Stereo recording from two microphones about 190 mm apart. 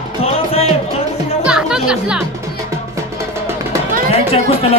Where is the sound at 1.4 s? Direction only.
5° right (ahead or behind).